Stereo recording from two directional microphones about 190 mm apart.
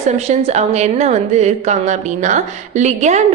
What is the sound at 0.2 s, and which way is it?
A woman's voice, 35° right (ahead or behind).